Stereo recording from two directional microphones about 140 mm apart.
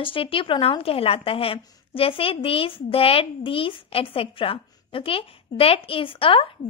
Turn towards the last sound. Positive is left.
turn(degrees=40)  # may be behind; listen again after turning